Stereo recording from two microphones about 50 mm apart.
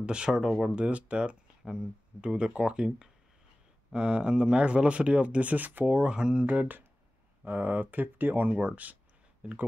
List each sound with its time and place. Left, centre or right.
0.0 s speech: centre
0.7 s speech: right
6.1 s speech: centre
6.4 s speech: right